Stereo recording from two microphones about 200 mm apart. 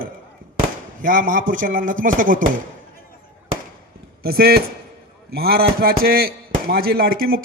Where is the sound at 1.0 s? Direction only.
45° right (ahead or behind).